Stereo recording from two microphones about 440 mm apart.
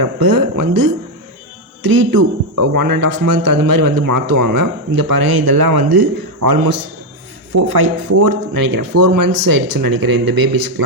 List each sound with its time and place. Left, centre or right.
0.0 s speech: right